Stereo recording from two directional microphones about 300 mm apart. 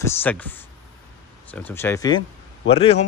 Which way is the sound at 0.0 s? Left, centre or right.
Centre.